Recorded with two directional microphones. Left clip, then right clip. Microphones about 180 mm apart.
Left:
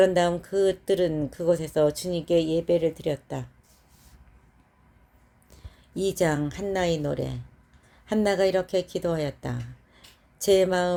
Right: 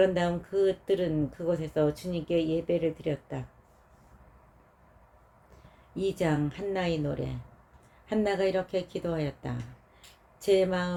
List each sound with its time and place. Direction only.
0.0 s speech: 45° left (ahead or behind)
5.9 s speech: 45° left (ahead or behind)